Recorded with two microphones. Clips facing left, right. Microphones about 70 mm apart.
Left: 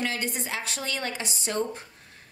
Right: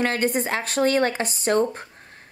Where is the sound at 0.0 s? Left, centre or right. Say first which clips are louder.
Right 8 dB; right.